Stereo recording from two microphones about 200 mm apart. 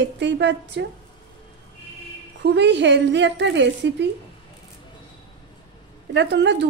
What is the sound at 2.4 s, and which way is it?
A woman's voice, 60° right (ahead or behind).